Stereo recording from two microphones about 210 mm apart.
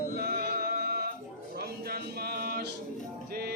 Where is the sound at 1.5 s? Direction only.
50° right (ahead or behind).